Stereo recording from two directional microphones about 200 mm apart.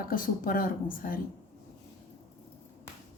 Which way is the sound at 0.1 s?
45° left (ahead or behind).